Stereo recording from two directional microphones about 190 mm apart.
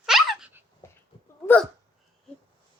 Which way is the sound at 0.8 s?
15° left (ahead or behind).